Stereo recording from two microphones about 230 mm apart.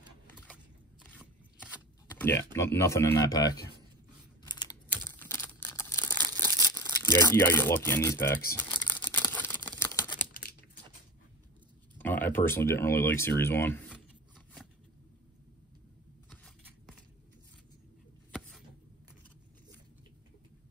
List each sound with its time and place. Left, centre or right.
2.1 s typing: centre
2.5 s speech: centre
4.5 s computer keyboard: centre
5.0 s typing: centre
5.7 s a sound: centre
9.7 s typewriter: centre
10.3 s a sound: left
12.0 s speech: centre